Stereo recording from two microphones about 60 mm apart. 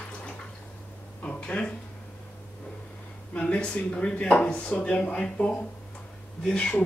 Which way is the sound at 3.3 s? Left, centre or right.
Centre.